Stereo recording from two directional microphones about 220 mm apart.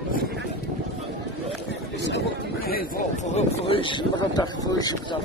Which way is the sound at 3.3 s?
25° left (ahead or behind).